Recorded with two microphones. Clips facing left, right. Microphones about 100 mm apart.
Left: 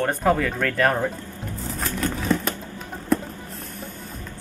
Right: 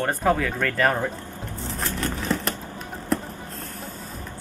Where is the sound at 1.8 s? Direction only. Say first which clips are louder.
Left 2 dB; centre (ahead or behind).